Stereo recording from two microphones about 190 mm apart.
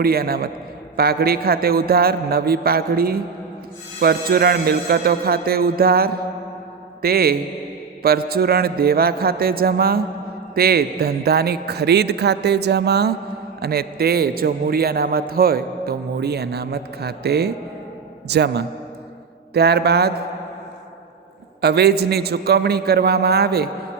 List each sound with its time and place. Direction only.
0.0 s a man's voice: 55° right (ahead or behind)
21.6 s a man's voice: 60° right (ahead or behind)